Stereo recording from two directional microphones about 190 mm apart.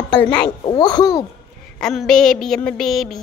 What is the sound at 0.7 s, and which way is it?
Speech, 20° left (ahead or behind).